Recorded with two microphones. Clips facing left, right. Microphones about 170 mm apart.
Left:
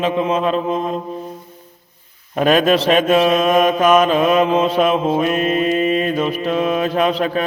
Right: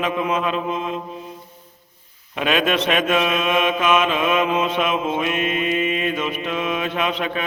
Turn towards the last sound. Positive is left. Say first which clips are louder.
# left 6 dB
turn(degrees=35)  # may be behind; listen again after turning